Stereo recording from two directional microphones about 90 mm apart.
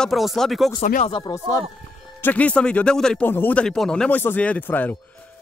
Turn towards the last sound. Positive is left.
turn(degrees=20)  # may be behind; listen again after turning